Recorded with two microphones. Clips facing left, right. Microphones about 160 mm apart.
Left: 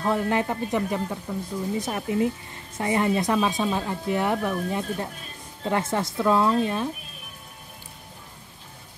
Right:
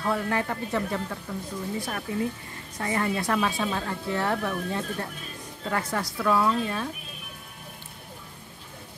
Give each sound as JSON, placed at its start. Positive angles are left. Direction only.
{"t": 0.0, "sound": "speech", "side_deg": 20}